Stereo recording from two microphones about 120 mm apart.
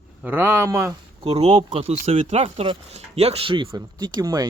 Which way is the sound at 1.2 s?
55° right (ahead or behind).